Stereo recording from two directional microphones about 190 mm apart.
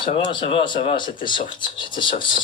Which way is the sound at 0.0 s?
25° left (ahead or behind).